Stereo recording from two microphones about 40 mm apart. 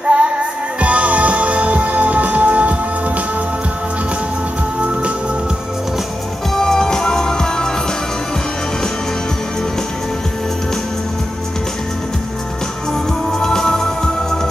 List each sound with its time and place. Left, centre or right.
0.0 s music: right
6.5 s music: centre
13.3 s music: centre